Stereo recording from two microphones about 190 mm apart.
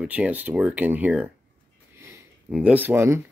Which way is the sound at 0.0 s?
5° right (ahead or behind).